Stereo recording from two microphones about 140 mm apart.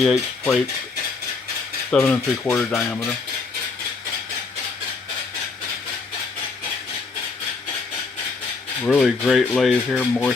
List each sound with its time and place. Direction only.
0.0 s speech: centre (ahead or behind)
1.9 s speech: centre (ahead or behind)
8.9 s speech: centre (ahead or behind)
10.0 s speech: 10° left (ahead or behind)